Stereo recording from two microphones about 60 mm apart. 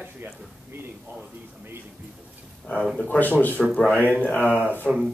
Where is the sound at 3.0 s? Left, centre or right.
Left.